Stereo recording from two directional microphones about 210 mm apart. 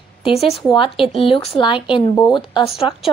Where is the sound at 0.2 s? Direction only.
30° left (ahead or behind).